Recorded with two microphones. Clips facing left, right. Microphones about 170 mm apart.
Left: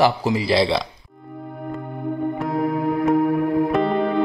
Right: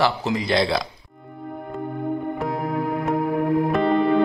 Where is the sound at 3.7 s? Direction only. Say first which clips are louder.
Even; centre (ahead or behind).